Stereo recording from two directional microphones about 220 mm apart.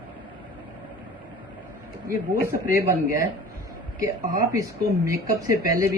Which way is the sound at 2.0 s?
10° right (ahead or behind).